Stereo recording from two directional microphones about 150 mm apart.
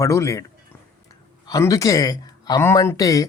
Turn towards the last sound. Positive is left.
turn(degrees=20)  # may be behind; listen again after turning